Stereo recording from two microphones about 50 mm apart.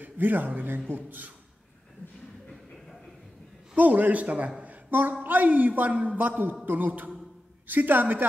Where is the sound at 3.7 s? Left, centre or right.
Right.